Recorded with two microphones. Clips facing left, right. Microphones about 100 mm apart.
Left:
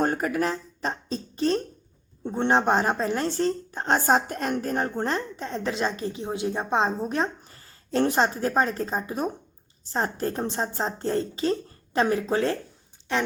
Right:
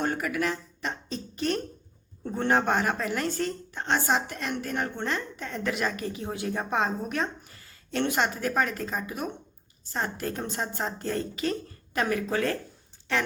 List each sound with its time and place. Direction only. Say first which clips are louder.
0.0 s a woman's voice: left 4 dB; 40° left (ahead or behind)